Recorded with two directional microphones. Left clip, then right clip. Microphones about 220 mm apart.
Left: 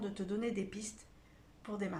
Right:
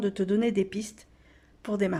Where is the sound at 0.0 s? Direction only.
40° right (ahead or behind).